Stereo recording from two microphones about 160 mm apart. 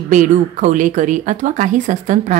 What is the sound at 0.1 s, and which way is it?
Speech, 50° right (ahead or behind).